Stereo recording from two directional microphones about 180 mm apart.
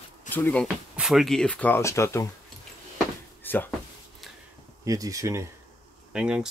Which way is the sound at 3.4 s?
10° left (ahead or behind).